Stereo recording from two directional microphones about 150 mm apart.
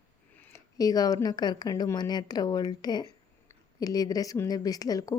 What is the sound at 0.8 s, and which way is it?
A woman's voice, 25° left (ahead or behind).